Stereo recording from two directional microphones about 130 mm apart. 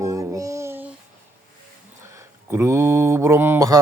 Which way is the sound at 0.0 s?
25° right (ahead or behind).